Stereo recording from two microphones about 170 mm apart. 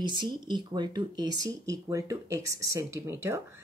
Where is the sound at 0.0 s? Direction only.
25° right (ahead or behind).